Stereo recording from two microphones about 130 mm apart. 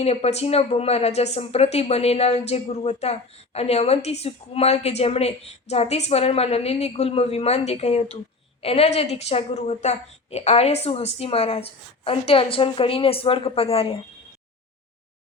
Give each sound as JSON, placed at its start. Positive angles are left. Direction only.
{"t": 0.0, "sound": "speech", "side_deg": 55}